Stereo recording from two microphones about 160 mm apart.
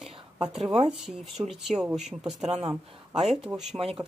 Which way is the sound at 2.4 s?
40° right (ahead or behind).